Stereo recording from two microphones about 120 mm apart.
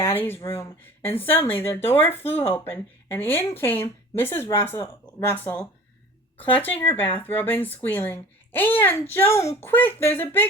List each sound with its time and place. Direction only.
0.0 s speech: 20° left (ahead or behind)